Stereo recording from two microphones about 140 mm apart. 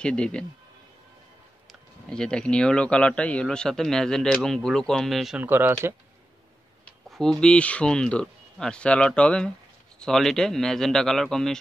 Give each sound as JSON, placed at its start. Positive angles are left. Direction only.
{"t": 0.0, "sound": "speech", "side_deg": 5}
{"t": 1.7, "sound": "speech", "side_deg": 5}
{"t": 5.4, "sound": "speech", "side_deg": -15}
{"t": 7.1, "sound": "speech", "side_deg": 5}